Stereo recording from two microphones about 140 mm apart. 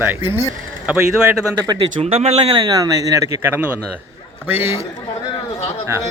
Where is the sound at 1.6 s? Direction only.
30° right (ahead or behind).